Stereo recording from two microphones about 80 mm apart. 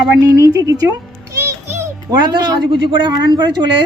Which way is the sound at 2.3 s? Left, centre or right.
Right.